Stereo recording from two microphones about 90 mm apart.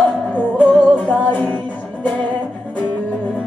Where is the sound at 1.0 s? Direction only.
15° left (ahead or behind).